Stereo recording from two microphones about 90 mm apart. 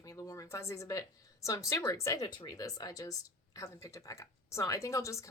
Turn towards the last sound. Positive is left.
turn(degrees=35)  # may be behind; listen again after turning